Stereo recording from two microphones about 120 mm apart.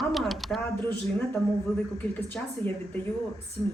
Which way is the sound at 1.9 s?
15° left (ahead or behind).